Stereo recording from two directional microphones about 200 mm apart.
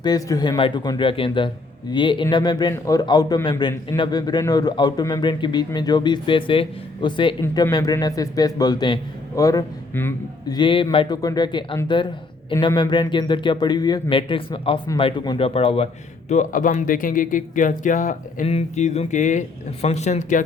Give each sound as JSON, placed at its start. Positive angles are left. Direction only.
{"t": 0.0, "sound": "a man's voice", "side_deg": 20}
{"t": 10.6, "sound": "a man's voice", "side_deg": 25}
{"t": 16.3, "sound": "speech", "side_deg": 40}